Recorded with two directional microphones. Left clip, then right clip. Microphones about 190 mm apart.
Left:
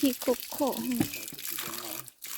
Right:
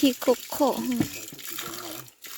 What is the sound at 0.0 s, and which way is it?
Speech, 15° right (ahead or behind).